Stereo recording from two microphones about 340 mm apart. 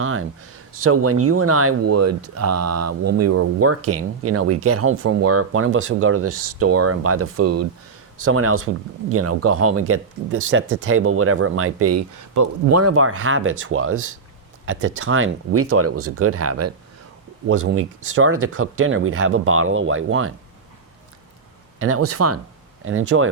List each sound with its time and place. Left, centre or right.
0.0 s a sound: right
0.9 s speech: right
21.8 s speech: right